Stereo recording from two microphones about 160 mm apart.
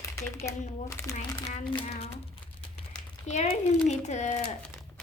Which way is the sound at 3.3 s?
50° left (ahead or behind).